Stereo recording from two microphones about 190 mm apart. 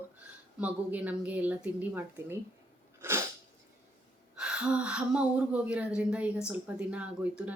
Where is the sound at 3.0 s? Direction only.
10° right (ahead or behind).